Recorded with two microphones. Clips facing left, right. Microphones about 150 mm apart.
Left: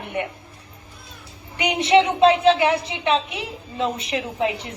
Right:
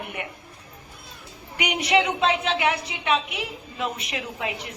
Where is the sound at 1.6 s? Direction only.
25° left (ahead or behind).